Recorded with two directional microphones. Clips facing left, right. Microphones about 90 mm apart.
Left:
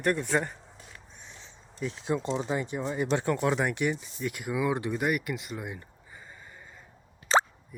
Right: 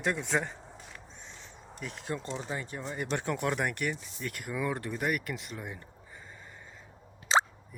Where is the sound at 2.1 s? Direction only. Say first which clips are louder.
Left 7 dB; 20° left (ahead or behind).